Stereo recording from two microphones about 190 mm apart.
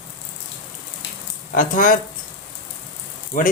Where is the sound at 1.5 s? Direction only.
45° left (ahead or behind).